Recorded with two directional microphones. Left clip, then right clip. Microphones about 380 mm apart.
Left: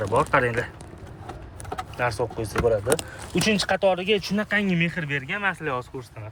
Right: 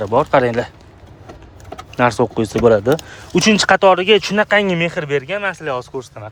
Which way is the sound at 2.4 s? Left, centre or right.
Right.